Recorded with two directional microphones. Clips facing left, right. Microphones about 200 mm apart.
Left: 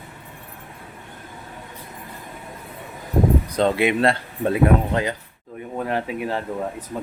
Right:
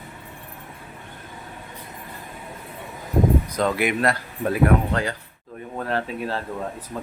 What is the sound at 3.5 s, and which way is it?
Speech, 30° left (ahead or behind).